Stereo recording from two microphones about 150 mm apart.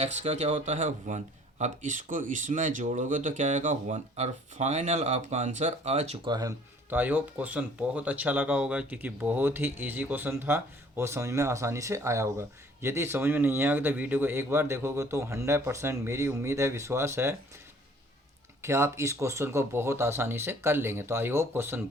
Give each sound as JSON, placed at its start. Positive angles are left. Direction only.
{"t": 0.0, "sound": "speech", "side_deg": -45}
{"t": 6.2, "sound": "speech", "side_deg": -25}
{"t": 6.9, "sound": "speech", "side_deg": -10}
{"t": 18.6, "sound": "speech", "side_deg": -20}